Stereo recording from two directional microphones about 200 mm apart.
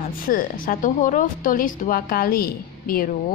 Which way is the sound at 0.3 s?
45° left (ahead or behind).